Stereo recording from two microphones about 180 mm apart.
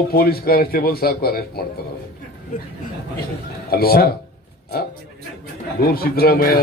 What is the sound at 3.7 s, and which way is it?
Speech, 55° left (ahead or behind).